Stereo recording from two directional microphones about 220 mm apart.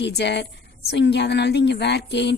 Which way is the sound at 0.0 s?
50° left (ahead or behind).